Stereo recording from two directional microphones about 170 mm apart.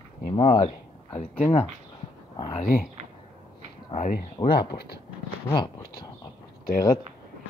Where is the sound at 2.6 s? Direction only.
55° left (ahead or behind).